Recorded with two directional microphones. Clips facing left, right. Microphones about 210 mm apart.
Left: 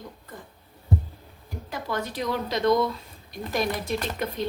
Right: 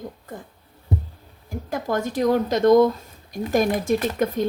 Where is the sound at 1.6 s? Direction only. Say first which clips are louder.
Right 6 dB; 45° right (ahead or behind).